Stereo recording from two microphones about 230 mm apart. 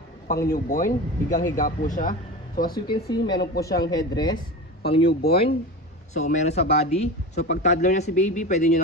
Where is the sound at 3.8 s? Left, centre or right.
Centre.